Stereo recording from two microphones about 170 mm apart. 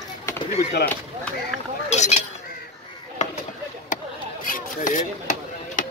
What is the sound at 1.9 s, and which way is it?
Speech, 40° left (ahead or behind).